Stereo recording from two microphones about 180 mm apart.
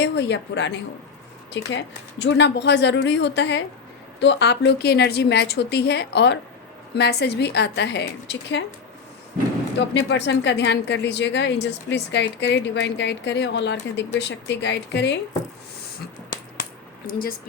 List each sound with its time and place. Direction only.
0.0 s a woman's voice: 75° left (ahead or behind)
9.7 s a woman's voice: 75° left (ahead or behind)
17.1 s speech: 55° left (ahead or behind)